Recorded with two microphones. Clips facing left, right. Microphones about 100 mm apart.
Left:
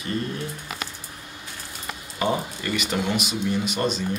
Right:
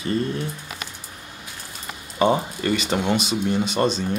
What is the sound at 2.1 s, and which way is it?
Speech, 30° right (ahead or behind).